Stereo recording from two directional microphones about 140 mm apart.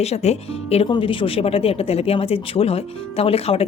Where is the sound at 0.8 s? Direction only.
35° left (ahead or behind).